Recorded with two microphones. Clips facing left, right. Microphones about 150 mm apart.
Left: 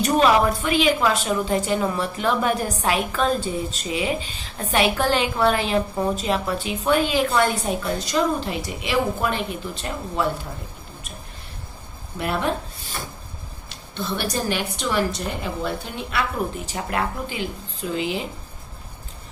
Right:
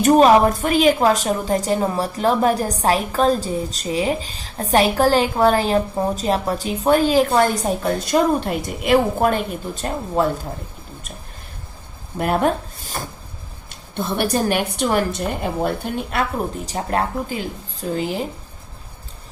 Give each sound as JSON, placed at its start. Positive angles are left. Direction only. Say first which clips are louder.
{"t": 0.0, "sound": "a woman's voice", "louder": "right 5 dB", "side_deg": -45}
{"t": 12.1, "sound": "a woman's voice", "louder": "right 5 dB", "side_deg": -50}
{"t": 16.6, "sound": "a woman's voice", "louder": "right 4 dB", "side_deg": -35}